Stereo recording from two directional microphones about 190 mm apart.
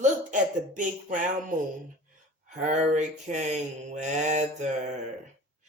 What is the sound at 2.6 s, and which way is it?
Mantra, 40° right (ahead or behind).